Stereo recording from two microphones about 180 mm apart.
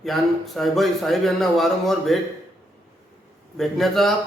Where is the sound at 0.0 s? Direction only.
Centre (ahead or behind).